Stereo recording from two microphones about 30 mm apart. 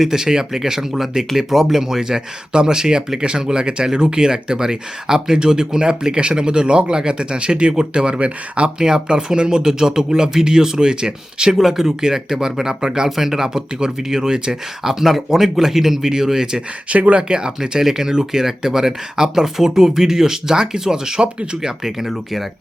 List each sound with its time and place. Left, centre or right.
0.0 s speech: centre
8.2 s speech: right
8.8 s speech: right
11.5 s speech: centre
13.1 s speech: centre
13.5 s speech: right
14.8 s speech: centre
16.9 s speech: right
17.2 s speech: right
17.7 s speech: centre
21.8 s speech: centre